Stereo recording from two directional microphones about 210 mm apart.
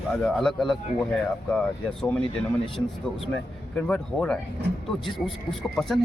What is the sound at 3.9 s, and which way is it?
Speech, 5° left (ahead or behind).